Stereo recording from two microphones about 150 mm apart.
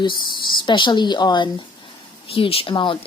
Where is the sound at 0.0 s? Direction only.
30° left (ahead or behind).